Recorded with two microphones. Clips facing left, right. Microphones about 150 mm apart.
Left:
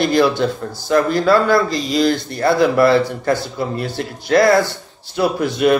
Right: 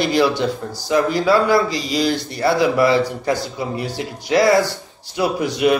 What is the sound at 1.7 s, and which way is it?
Speech, 50° left (ahead or behind).